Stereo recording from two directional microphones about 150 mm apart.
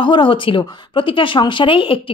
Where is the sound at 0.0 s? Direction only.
30° left (ahead or behind).